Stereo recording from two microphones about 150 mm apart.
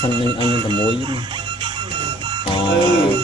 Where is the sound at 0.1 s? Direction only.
30° right (ahead or behind).